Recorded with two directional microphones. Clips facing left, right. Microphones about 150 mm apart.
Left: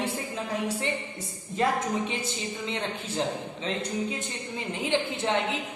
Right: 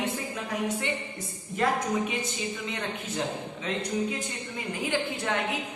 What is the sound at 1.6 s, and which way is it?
A woman's voice, 30° left (ahead or behind).